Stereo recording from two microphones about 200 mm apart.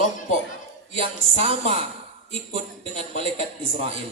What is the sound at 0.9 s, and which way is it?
A woman's voice, 30° right (ahead or behind).